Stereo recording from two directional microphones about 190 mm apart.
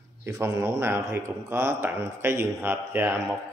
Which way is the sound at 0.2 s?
15° right (ahead or behind).